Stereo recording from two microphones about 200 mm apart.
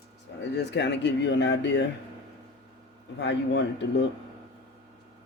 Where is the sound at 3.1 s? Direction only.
60° left (ahead or behind).